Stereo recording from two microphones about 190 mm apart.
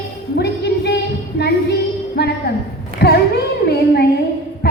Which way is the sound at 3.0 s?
55° left (ahead or behind).